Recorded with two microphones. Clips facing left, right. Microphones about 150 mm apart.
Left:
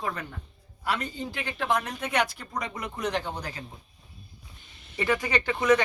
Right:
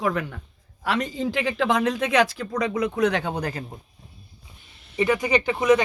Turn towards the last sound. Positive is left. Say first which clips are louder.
# right 6 dB
turn(degrees=-15)  # may be behind; listen again after turning